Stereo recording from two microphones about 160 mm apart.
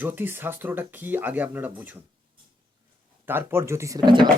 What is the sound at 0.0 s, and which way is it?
Speech, 15° right (ahead or behind).